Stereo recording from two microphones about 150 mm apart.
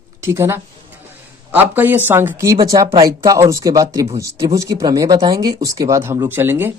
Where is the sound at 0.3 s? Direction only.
15° right (ahead or behind).